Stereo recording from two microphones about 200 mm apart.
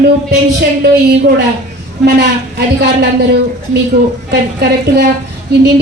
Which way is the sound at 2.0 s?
55° right (ahead or behind).